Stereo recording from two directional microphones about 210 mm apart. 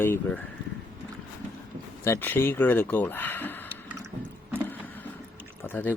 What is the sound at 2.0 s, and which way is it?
Speech, 10° left (ahead or behind).